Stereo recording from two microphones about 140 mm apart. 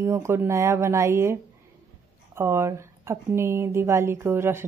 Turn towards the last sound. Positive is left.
turn(degrees=-15)  # may be behind; listen again after turning